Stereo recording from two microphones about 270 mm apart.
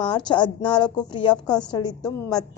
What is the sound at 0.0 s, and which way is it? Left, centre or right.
A woman's voice, centre.